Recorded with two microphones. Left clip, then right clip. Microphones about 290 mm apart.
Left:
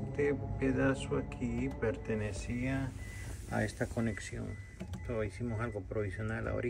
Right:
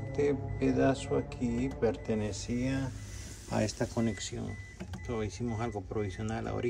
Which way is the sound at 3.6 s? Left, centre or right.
Right.